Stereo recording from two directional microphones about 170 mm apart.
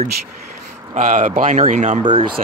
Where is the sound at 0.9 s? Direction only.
50° right (ahead or behind).